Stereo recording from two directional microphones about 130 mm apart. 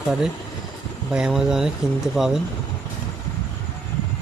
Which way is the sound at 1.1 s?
5° right (ahead or behind).